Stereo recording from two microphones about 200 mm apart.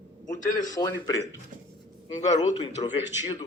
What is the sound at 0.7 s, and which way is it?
Speech, 20° left (ahead or behind).